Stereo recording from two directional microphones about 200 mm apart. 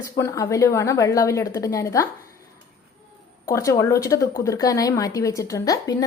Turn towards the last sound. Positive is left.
turn(degrees=20)  # may be behind; listen again after turning